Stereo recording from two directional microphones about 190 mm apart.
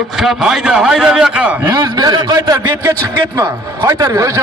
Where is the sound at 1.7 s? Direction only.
20° right (ahead or behind).